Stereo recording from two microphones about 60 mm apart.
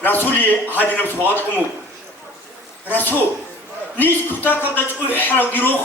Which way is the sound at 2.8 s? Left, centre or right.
Left.